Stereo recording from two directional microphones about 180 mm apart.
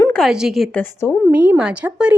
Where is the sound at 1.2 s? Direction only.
10° right (ahead or behind).